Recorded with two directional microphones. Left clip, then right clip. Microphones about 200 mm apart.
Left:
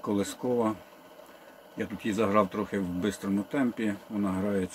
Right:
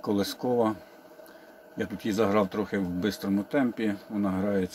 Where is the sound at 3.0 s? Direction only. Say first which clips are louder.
Right 2 dB; 15° left (ahead or behind).